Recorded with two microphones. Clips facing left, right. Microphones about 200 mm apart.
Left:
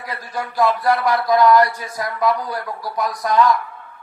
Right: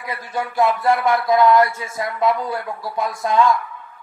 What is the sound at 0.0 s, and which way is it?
A man's voice, 25° right (ahead or behind).